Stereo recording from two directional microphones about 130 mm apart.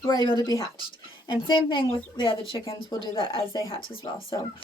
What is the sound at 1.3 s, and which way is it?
A woman's voice, 40° left (ahead or behind).